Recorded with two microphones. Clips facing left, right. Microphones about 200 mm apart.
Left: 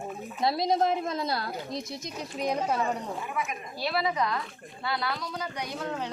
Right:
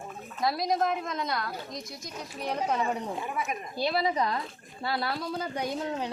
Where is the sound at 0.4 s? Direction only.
25° left (ahead or behind); by 2.8 s 10° left (ahead or behind).